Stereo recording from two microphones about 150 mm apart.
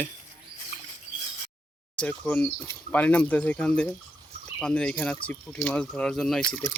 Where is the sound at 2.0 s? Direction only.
10° left (ahead or behind).